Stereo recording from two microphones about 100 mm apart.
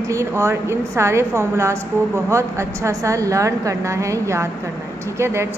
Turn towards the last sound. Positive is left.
turn(degrees=-25)  # may be behind; listen again after turning